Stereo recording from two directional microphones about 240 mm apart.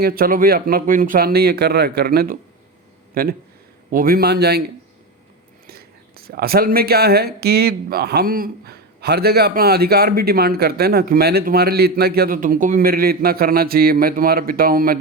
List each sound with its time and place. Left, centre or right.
0.0 s speech: right
5.6 s speech: right